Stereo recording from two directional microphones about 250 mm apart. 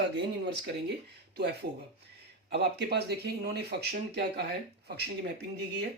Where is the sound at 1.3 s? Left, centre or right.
Right.